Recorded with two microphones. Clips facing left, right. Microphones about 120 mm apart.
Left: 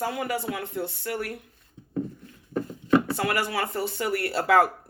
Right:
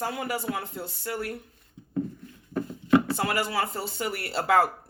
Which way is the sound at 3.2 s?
30° right (ahead or behind).